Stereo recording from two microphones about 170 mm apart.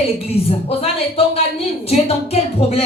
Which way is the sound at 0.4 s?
35° left (ahead or behind).